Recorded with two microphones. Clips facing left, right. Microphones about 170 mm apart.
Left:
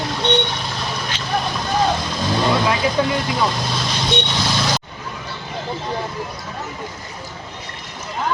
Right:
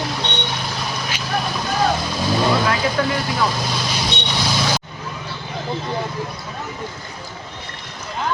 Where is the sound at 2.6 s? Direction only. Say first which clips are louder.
Left 1 dB; 20° left (ahead or behind).